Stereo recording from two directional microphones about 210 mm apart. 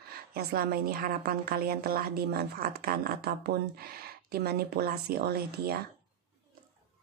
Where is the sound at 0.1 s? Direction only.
45° right (ahead or behind).